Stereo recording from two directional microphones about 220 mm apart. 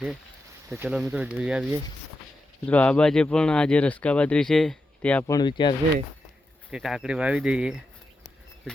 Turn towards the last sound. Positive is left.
turn(degrees=-5)  # may be behind; listen again after turning